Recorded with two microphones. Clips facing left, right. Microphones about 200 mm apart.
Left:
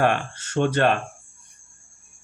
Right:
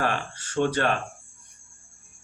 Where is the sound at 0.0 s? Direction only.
65° left (ahead or behind).